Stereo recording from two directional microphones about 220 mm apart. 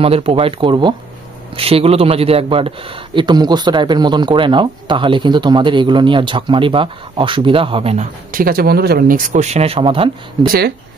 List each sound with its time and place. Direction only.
0.0 s speech: 25° right (ahead or behind)
8.3 s speech: 40° right (ahead or behind); by 10.1 s 25° right (ahead or behind)
10.4 s speech: 45° right (ahead or behind)